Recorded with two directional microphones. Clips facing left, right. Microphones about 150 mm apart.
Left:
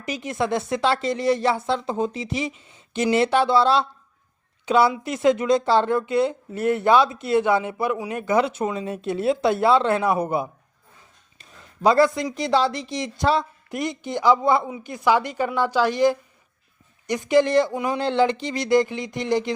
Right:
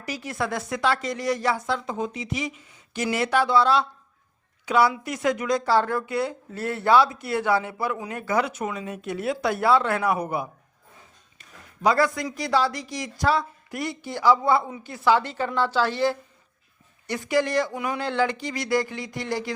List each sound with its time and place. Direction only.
0.0 s speech: 20° left (ahead or behind)